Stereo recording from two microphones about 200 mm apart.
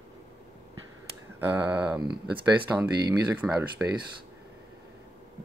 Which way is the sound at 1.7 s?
20° right (ahead or behind).